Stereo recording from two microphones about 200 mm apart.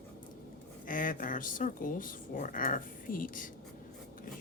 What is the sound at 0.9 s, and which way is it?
Speech, 40° left (ahead or behind).